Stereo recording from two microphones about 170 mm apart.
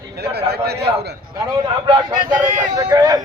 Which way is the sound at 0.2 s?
70° right (ahead or behind).